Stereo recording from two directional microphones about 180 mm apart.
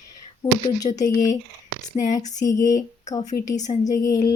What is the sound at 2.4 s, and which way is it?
Speech, 20° left (ahead or behind).